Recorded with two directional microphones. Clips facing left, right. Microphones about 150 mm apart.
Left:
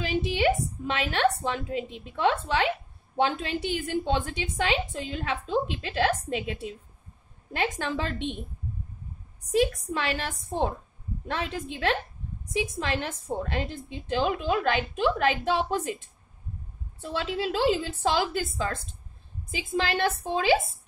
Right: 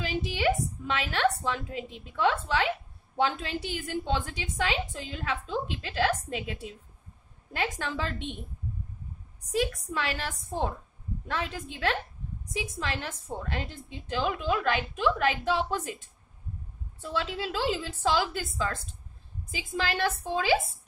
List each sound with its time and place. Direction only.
0.0 s a woman's voice: 25° left (ahead or behind)
9.9 s a woman's voice: 25° left (ahead or behind)
17.0 s a woman's voice: 25° left (ahead or behind)